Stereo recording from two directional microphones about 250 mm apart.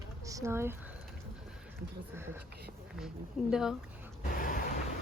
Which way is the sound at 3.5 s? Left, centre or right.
Centre.